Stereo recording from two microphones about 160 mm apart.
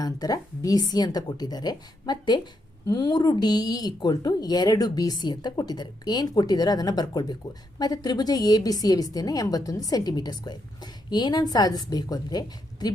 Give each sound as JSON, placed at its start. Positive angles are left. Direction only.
{"t": 0.0, "sound": "speech", "side_deg": 25}